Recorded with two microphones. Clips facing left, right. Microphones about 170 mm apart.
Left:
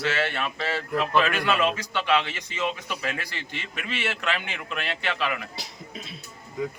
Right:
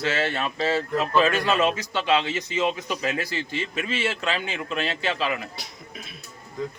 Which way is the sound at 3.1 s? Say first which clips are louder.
Right 7 dB; 40° right (ahead or behind).